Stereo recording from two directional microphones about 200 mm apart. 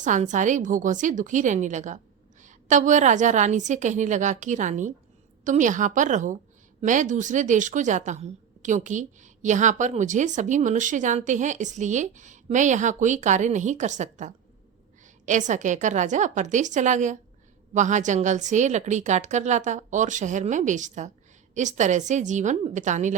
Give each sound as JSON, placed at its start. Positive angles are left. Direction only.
{"t": 0.0, "sound": "a woman's voice", "side_deg": -40}